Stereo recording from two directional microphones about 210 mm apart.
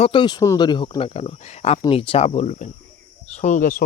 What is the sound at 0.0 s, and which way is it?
Speech, 25° left (ahead or behind).